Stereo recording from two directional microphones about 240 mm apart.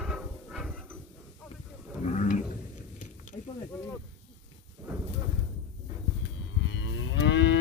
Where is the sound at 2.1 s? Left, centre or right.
Left.